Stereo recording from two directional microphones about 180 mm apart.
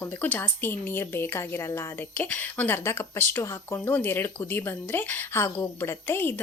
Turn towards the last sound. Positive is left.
turn(degrees=10)  # may be behind; listen again after turning